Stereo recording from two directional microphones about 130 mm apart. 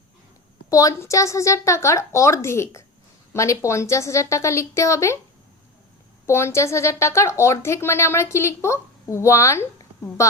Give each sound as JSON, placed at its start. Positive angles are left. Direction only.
{"t": 0.7, "sound": "a woman's voice", "side_deg": 25}
{"t": 6.2, "sound": "a woman's voice", "side_deg": 20}